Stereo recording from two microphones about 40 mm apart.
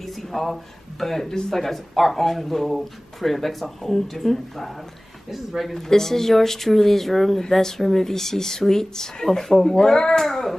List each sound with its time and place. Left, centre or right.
0.0 s speech: centre
5.8 s speech: centre
10.2 s speech: centre